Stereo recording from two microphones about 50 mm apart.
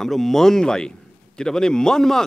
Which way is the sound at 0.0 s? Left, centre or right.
Centre.